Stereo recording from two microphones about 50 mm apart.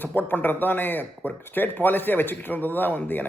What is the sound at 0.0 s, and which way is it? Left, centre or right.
A man's voice, left.